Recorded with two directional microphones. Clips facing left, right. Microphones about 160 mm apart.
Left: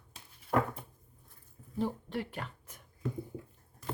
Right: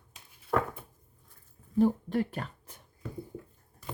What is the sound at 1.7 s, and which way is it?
Speech, 45° right (ahead or behind).